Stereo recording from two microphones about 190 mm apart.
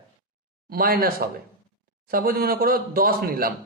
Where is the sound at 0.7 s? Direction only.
50° right (ahead or behind).